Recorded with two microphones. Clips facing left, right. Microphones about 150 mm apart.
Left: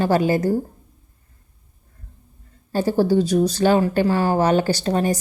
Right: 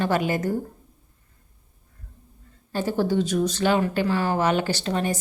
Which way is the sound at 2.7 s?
35° left (ahead or behind).